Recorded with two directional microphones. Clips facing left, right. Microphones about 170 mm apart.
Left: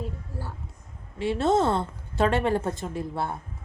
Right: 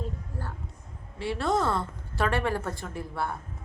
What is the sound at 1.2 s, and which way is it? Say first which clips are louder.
A woman's voice: left 4 dB; 20° left (ahead or behind).